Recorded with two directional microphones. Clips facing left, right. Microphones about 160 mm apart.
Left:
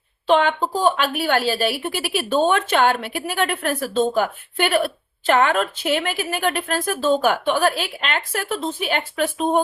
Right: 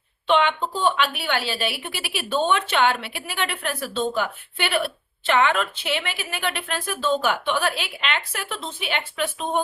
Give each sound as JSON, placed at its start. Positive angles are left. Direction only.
{"t": 0.3, "sound": "a woman's voice", "side_deg": 40}